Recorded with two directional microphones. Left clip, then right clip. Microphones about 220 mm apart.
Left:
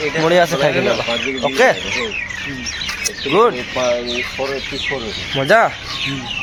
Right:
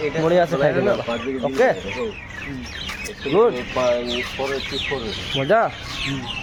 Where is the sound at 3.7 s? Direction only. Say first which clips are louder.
Left 2 dB; 30° left (ahead or behind).